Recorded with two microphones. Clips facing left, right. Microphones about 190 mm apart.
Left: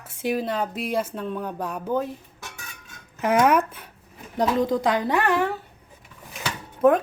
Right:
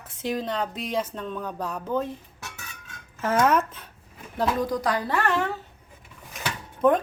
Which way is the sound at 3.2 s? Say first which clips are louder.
Left 3 dB; 15° left (ahead or behind).